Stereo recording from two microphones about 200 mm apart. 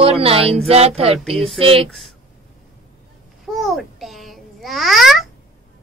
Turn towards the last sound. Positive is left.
turn(degrees=0)  # may be behind; listen again after turning